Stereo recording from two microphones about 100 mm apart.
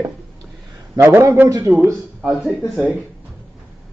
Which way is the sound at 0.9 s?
25° right (ahead or behind).